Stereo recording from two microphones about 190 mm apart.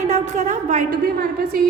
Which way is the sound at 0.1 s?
40° right (ahead or behind).